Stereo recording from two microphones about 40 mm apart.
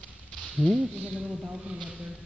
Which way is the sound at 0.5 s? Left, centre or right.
Centre.